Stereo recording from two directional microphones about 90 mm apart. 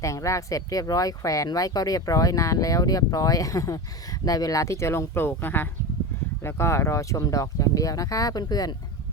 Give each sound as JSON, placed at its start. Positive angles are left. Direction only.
{"t": 0.0, "sound": "speech", "side_deg": 35}